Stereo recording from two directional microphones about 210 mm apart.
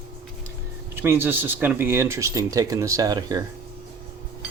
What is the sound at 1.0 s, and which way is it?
Speech, 10° right (ahead or behind).